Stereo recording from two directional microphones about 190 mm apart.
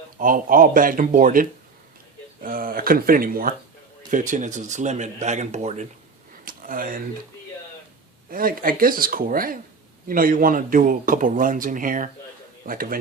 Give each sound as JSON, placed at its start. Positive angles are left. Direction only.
{"t": 0.2, "sound": "speech", "side_deg": -45}
{"t": 6.4, "sound": "a sound", "side_deg": -45}
{"t": 8.3, "sound": "speech", "side_deg": -50}